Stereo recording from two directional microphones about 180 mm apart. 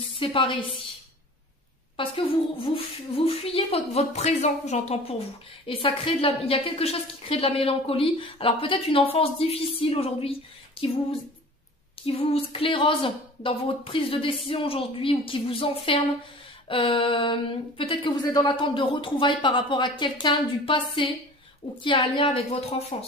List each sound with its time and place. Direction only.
0.2 s speech: 30° left (ahead or behind)
2.0 s a woman's voice: 30° left (ahead or behind)
12.1 s a woman's voice: 30° left (ahead or behind)